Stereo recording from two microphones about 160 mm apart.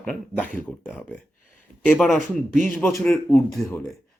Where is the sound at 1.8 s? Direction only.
Centre (ahead or behind).